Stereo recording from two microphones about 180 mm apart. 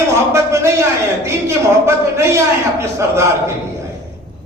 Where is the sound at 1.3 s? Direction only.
15° right (ahead or behind).